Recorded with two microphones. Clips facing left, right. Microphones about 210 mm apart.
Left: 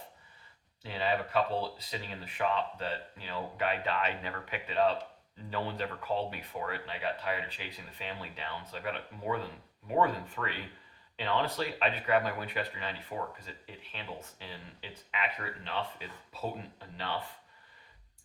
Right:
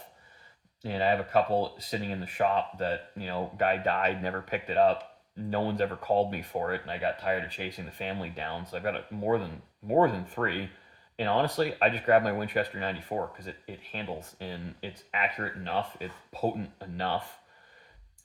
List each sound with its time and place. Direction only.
0.9 s speech: 45° right (ahead or behind)